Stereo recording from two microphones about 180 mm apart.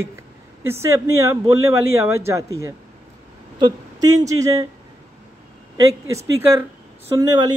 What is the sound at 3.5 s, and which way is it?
Speech, 25° right (ahead or behind).